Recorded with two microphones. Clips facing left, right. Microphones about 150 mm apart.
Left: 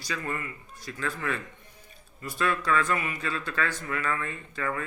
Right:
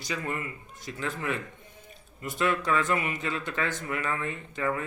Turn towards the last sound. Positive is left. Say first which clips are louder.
# right 2 dB
turn(degrees=-20)  # may be behind; listen again after turning